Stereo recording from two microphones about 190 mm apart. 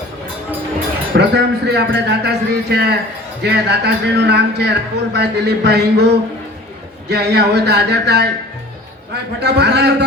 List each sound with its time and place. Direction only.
1.1 s a man's voice: 60° right (ahead or behind)
7.1 s a man's voice: 60° right (ahead or behind)
9.4 s a man's voice: 60° right (ahead or behind)